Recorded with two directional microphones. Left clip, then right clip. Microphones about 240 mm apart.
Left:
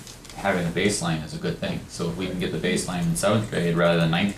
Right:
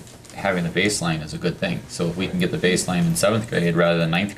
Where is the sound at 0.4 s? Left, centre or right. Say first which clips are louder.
Right 2 dB; centre.